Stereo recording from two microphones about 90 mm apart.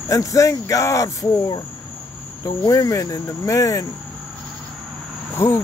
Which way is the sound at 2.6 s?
45° left (ahead or behind).